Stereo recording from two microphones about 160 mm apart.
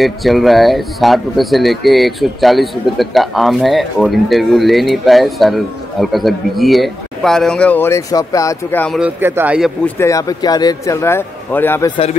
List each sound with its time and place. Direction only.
0.0 s speech: centre (ahead or behind); by 8.8 s 20° left (ahead or behind)
9.0 s a man's voice: 10° right (ahead or behind)
9.8 s a man's voice: 15° left (ahead or behind)